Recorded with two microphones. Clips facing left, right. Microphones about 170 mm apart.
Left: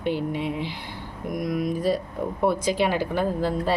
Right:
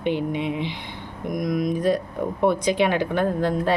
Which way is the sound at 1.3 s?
10° left (ahead or behind).